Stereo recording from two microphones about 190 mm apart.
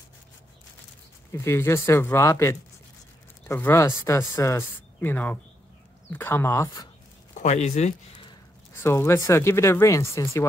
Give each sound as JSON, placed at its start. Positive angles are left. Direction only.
{"t": 1.3, "sound": "speech", "side_deg": 15}
{"t": 7.3, "sound": "speech", "side_deg": 40}
{"t": 8.8, "sound": "speech", "side_deg": 15}